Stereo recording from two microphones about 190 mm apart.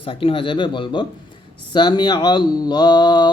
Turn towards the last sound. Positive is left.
turn(degrees=25)  # may be behind; listen again after turning